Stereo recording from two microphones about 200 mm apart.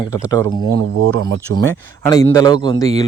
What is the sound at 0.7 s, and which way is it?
Speech, 70° right (ahead or behind).